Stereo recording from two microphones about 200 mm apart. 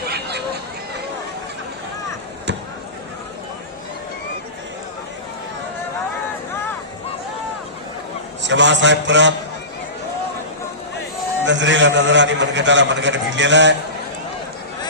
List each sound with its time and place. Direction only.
0.0 s a sound: 55° right (ahead or behind)
8.4 s a man's voice: 65° right (ahead or behind)
11.4 s a man's voice: 65° right (ahead or behind)